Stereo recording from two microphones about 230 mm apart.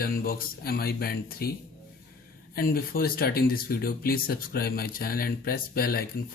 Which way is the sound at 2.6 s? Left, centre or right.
Left.